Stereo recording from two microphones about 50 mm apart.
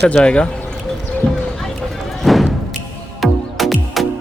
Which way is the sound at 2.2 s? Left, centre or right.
Centre.